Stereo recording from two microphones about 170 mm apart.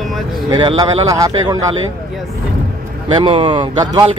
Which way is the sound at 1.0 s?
20° right (ahead or behind).